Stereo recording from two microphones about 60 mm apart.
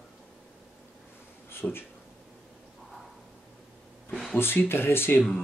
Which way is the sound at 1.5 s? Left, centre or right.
Left.